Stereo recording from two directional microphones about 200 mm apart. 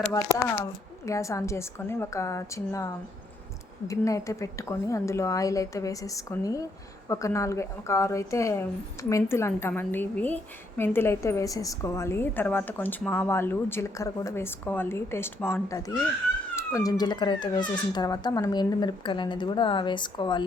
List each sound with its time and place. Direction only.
0.3 s a woman's voice: 15° left (ahead or behind)